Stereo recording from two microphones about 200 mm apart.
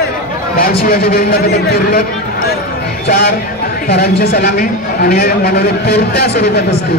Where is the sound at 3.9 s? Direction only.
50° left (ahead or behind).